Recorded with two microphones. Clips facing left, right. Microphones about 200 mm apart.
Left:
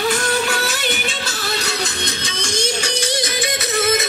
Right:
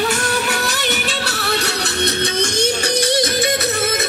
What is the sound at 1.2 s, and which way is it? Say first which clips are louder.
Music: right 3 dB; 65° right (ahead or behind).